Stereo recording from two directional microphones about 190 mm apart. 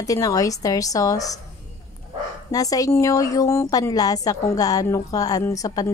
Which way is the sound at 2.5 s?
20° left (ahead or behind).